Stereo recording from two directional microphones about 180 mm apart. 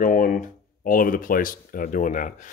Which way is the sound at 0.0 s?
50° left (ahead or behind).